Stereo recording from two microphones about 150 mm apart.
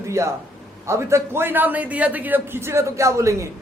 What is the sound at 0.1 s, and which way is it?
A man's voice, 20° right (ahead or behind).